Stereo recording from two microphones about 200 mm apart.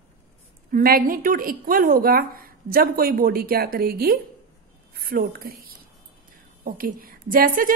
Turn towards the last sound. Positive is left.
turn(degrees=-45)  # may be behind; listen again after turning